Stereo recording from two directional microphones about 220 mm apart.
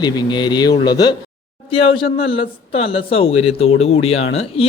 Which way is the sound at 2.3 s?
25° left (ahead or behind).